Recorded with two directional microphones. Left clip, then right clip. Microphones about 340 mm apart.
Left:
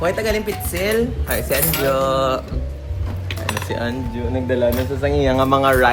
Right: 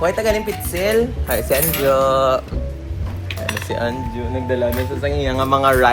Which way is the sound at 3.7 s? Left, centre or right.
Centre.